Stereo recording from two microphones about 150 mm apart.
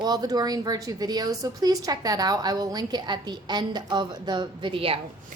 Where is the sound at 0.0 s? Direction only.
25° right (ahead or behind).